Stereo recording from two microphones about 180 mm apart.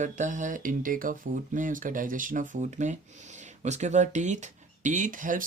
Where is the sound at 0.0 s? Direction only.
45° right (ahead or behind).